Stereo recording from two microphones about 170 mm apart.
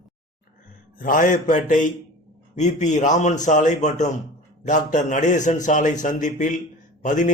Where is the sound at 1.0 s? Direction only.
50° left (ahead or behind).